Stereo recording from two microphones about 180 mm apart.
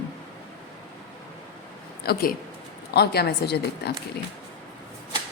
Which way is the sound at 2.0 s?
55° left (ahead or behind).